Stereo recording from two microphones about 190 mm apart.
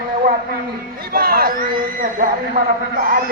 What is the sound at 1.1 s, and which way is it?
Speech, 50° right (ahead or behind).